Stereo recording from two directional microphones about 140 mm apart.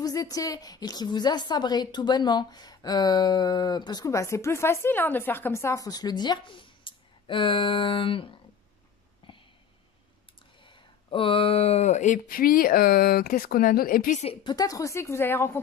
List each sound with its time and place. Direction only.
0.0 s a woman's voice: 25° left (ahead or behind)
9.2 s a sound: 40° left (ahead or behind)
10.7 s speech: 40° left (ahead or behind); by 14.2 s 80° left
14.2 s speech: 45° left (ahead or behind)
14.5 s a woman's voice: 25° left (ahead or behind)